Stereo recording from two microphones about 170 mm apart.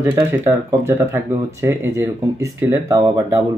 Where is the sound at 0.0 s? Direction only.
15° right (ahead or behind).